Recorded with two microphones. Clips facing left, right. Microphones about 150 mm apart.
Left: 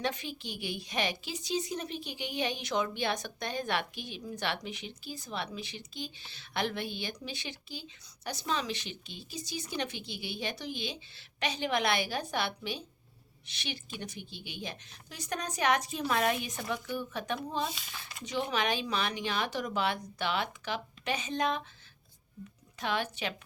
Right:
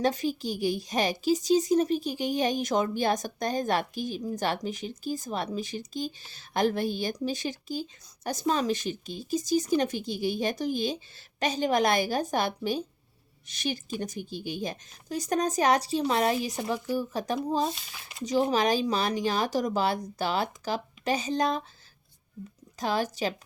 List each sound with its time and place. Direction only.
0.0 s a woman's voice: 40° right (ahead or behind)
22.8 s a woman's voice: 40° right (ahead or behind)